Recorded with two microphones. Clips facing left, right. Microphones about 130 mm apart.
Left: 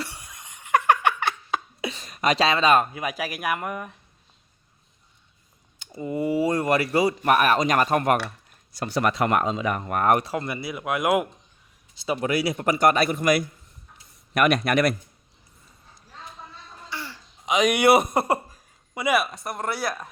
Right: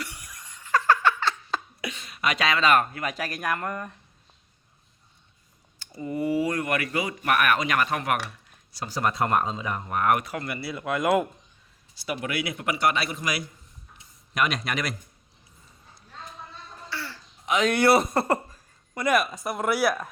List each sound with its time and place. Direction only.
0.0 s laughter: 25° left (ahead or behind)
1.8 s speech: 35° left (ahead or behind); by 3.9 s 10° left (ahead or behind)
5.8 s speech: 20° left (ahead or behind); by 8.2 s 40° left (ahead or behind)
8.7 s speech: 65° left (ahead or behind)
10.0 s speech: 35° left (ahead or behind); by 11.3 s 10° left (ahead or behind)
12.2 s a man's voice: 35° left (ahead or behind); by 14.9 s 55° left (ahead or behind)
16.9 s throat clearing: 15° left (ahead or behind)
18.1 s speech: 15° left (ahead or behind); by 20.1 s 5° right (ahead or behind)